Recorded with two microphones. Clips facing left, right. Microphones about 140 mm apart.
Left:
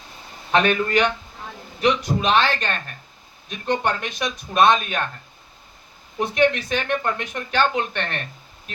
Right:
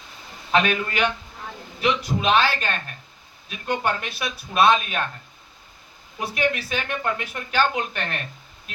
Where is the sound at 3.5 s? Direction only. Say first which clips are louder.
Left 3 dB; 35° left (ahead or behind).